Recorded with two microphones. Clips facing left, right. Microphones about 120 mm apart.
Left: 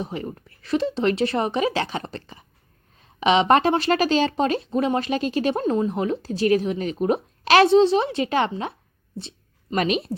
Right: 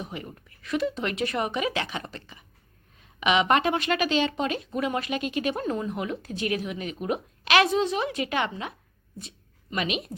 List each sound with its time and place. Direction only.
0.0 s a woman's voice: 35° left (ahead or behind)
9.1 s a sound: 30° left (ahead or behind)
9.7 s a woman's voice: 40° left (ahead or behind)